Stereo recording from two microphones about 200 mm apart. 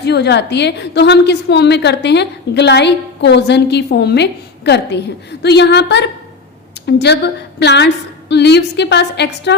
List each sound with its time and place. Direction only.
0.0 s a woman's voice: 55° left (ahead or behind)